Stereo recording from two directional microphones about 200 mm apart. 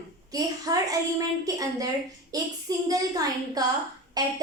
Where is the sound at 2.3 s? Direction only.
20° right (ahead or behind).